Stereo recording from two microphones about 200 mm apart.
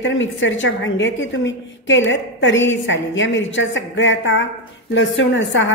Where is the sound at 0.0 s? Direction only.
70° left (ahead or behind).